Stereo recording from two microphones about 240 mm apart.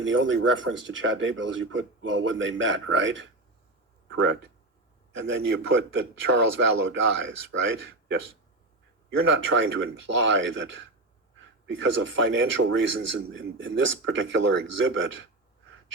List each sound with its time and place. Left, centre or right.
0.0 s a man's voice: right